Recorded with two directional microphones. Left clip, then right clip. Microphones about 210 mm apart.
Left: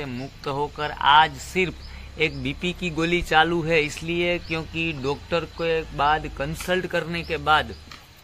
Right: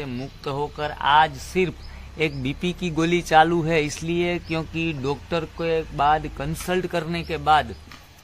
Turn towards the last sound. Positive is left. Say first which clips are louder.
# right 1 dB
turn(degrees=-50)  # may be behind; listen again after turning